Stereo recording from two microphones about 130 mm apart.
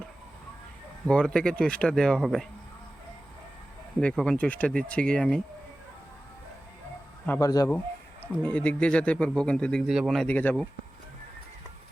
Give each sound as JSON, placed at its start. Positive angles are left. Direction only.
{"t": 1.0, "sound": "speech", "side_deg": 5}
{"t": 4.1, "sound": "speech", "side_deg": 5}
{"t": 7.3, "sound": "speech", "side_deg": 25}
{"t": 8.2, "sound": "speech", "side_deg": 15}
{"t": 9.8, "sound": "speech", "side_deg": -5}